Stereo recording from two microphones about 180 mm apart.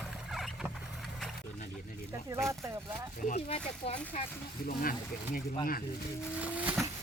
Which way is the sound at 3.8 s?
30° left (ahead or behind).